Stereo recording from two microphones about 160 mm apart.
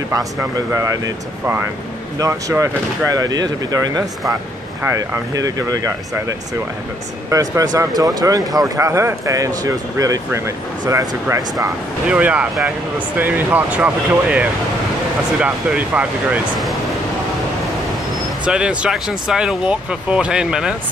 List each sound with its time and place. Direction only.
0.1 s speech: 20° right (ahead or behind)
12.1 s speech: 10° right (ahead or behind)
18.4 s speech: 5° right (ahead or behind)